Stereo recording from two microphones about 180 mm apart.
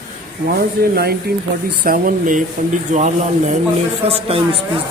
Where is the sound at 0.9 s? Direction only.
60° right (ahead or behind).